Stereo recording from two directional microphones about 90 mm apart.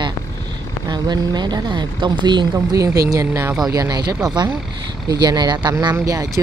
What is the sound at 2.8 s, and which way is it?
Speech, 40° right (ahead or behind).